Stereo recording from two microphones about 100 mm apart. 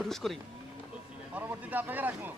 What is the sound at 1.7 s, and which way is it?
Speech, 15° right (ahead or behind).